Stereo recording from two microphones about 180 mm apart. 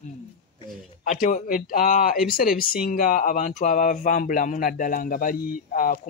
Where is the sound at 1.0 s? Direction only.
45° left (ahead or behind).